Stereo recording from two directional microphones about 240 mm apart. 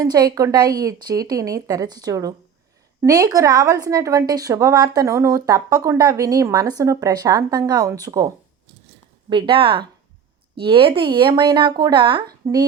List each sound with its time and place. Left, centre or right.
0.0 s a woman's voice: centre
9.3 s a woman's voice: right